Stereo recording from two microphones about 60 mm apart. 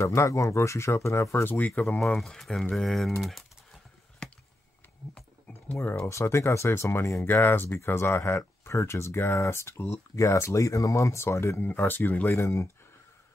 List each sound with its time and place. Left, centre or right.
0.0 s speech: left
1.8 s speech: left
2.1 s speech: centre
3.2 s typing: centre
4.2 s a sound: centre
6.0 s speech: left
7.2 s speech: left
10.1 s speech: left
12.4 s speech: left